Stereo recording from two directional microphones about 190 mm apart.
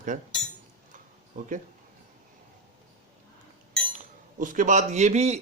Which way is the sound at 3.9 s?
45° right (ahead or behind).